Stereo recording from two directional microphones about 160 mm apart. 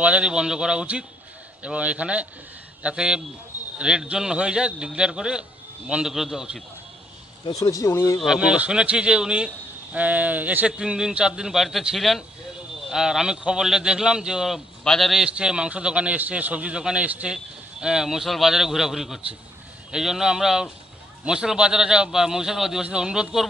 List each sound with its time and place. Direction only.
0.0 s a man's voice: 5° right (ahead or behind)
7.4 s speech: 20° left (ahead or behind)
8.2 s speech: 5° right (ahead or behind)